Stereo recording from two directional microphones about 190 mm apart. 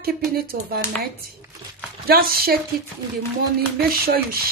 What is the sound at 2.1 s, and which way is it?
Speech, 50° right (ahead or behind).